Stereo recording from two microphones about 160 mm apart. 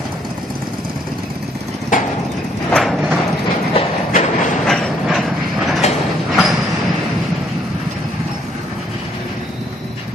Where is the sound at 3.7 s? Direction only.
50° left (ahead or behind).